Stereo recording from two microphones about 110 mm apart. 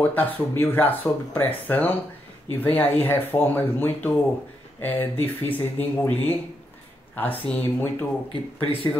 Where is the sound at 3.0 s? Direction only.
20° left (ahead or behind).